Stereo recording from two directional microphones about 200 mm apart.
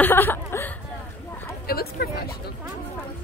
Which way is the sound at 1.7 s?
50° left (ahead or behind).